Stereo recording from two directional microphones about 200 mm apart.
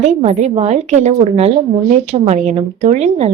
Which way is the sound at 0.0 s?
35° right (ahead or behind).